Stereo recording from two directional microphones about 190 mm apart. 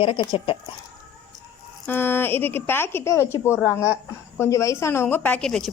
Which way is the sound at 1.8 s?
10° left (ahead or behind).